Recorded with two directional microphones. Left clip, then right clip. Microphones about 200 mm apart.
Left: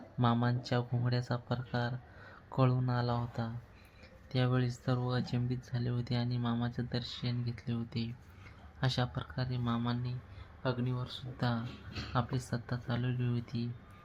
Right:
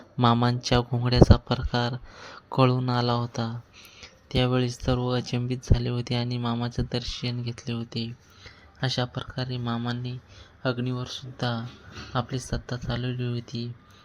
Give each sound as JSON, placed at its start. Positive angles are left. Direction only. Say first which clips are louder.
{"t": 0.2, "sound": "speech", "louder": "right 10 dB", "side_deg": -45}